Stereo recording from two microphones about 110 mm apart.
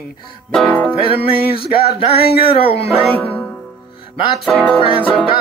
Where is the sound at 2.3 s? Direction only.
60° left (ahead or behind).